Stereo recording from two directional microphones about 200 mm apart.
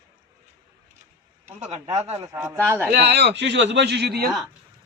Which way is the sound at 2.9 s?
55° right (ahead or behind).